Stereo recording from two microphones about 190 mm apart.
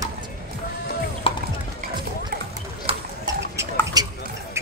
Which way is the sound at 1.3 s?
30° left (ahead or behind).